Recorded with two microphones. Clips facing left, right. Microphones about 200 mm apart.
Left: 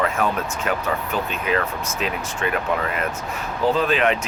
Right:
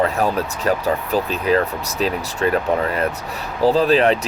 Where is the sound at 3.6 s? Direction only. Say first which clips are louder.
Right 5 dB; 35° right (ahead or behind).